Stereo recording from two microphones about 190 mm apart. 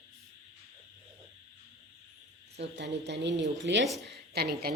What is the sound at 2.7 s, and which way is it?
A woman's voice, 65° right (ahead or behind).